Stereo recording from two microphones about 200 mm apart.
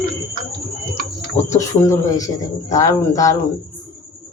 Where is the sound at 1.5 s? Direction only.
15° left (ahead or behind).